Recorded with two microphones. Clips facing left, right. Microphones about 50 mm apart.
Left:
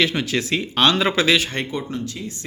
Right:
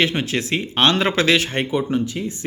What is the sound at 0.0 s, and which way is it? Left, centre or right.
Speech, right.